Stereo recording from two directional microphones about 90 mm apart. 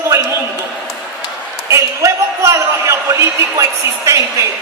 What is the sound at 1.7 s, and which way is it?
A woman's voice, 35° right (ahead or behind).